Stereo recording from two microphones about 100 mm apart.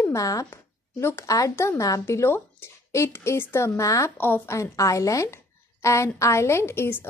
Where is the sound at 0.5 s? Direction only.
25° left (ahead or behind).